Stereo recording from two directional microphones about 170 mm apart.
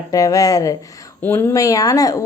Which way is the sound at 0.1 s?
20° left (ahead or behind).